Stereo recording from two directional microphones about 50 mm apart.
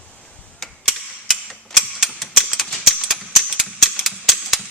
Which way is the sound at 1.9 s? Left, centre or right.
Centre.